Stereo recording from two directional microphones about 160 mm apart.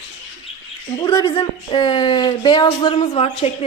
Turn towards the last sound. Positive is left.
turn(degrees=40)  # may be behind; listen again after turning